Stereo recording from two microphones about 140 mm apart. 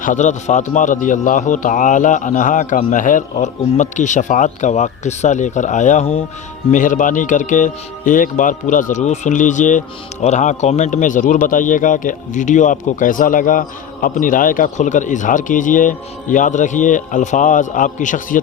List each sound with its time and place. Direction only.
0.0 s a man's voice: 65° left (ahead or behind); by 6.2 s 45° left (ahead or behind)
6.7 s speech: 65° left (ahead or behind)